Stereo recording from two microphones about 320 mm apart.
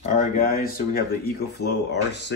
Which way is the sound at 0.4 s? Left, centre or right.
Left.